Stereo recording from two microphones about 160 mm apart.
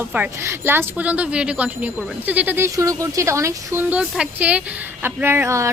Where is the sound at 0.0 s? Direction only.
10° right (ahead or behind).